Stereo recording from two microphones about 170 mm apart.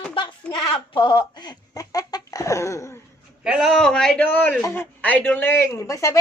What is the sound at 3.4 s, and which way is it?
A man's voice, 5° right (ahead or behind).